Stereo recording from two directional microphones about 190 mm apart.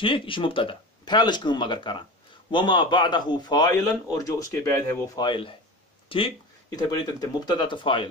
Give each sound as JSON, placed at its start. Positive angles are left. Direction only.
{"t": 0.0, "sound": "a man's voice", "side_deg": 25}